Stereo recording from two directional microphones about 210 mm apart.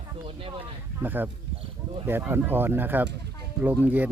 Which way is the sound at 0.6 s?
10° right (ahead or behind).